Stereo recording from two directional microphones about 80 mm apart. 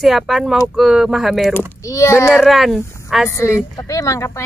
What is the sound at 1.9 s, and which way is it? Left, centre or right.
Speech, left.